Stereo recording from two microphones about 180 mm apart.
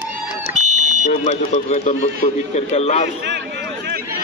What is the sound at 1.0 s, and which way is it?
Speech, 40° left (ahead or behind).